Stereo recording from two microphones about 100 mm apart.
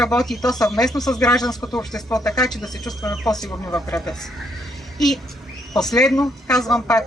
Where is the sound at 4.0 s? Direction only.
5° left (ahead or behind).